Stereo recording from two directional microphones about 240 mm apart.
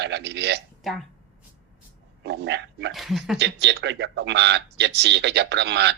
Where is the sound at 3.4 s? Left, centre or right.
Right.